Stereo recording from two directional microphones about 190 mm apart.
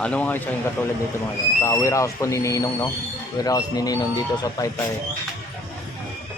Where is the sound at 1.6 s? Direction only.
15° left (ahead or behind).